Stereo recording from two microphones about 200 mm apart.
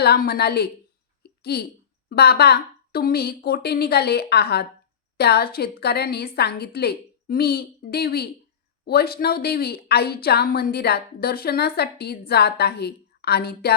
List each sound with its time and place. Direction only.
0.0 s a woman's voice: 50° left (ahead or behind)
1.2 s a sound: 55° left (ahead or behind)
2.0 s a woman's voice: 50° left (ahead or behind)